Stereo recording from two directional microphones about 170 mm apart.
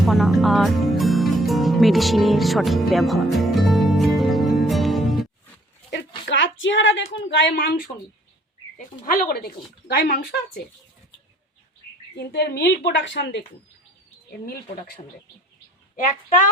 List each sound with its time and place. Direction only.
0.0 s speech: centre (ahead or behind)
2.9 s music: centre (ahead or behind)
6.2 s a woman's voice: 90° left
7.5 s speech: 65° left (ahead or behind)
9.0 s speech: 55° left (ahead or behind)
12.1 s a woman's voice: 80° left